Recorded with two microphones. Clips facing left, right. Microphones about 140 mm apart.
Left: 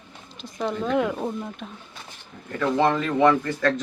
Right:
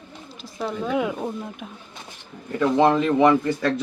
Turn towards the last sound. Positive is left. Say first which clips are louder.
# right 2 dB
turn(degrees=-10)  # may be behind; listen again after turning